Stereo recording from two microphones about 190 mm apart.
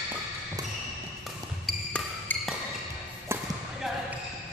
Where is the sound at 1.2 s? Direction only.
5° left (ahead or behind).